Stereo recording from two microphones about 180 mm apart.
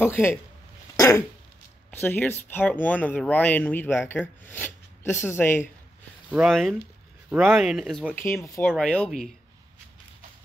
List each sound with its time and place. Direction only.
0.0 s speech: 10° left (ahead or behind)
0.9 s a sound: 15° left (ahead or behind)
1.9 s speech: 10° left (ahead or behind)
6.3 s speech: centre (ahead or behind)